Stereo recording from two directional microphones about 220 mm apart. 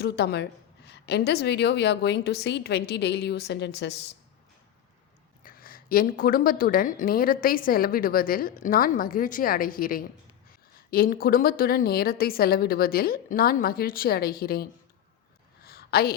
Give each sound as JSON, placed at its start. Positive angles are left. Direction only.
{"t": 0.0, "sound": "a woman's voice", "side_deg": 50}
{"t": 5.4, "sound": "a woman's voice", "side_deg": 40}
{"t": 15.6, "sound": "a sound", "side_deg": 45}